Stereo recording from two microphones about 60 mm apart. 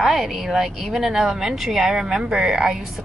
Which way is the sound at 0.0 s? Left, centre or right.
Centre.